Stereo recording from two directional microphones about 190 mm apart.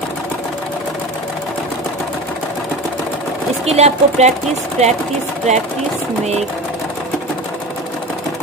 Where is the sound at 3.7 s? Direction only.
35° right (ahead or behind).